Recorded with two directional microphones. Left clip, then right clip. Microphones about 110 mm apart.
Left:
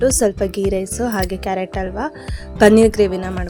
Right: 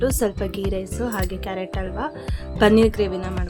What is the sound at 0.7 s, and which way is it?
A woman's voice, 55° left (ahead or behind).